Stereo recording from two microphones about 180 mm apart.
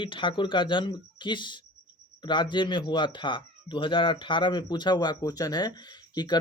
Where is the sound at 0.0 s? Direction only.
25° left (ahead or behind).